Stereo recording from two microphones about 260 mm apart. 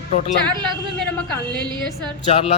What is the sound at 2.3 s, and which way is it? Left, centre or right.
Speech, left.